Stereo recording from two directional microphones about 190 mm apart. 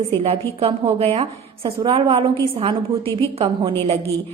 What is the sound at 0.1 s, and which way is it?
A woman's voice, 30° right (ahead or behind).